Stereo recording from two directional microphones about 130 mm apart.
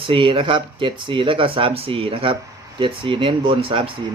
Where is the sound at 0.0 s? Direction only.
40° right (ahead or behind).